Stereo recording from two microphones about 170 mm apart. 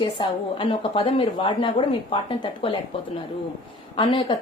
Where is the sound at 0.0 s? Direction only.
30° left (ahead or behind).